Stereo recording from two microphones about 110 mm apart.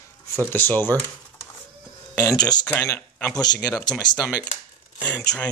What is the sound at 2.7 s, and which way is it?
Speech, 25° left (ahead or behind).